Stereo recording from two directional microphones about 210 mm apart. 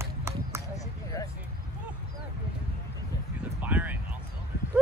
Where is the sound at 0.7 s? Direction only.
15° left (ahead or behind).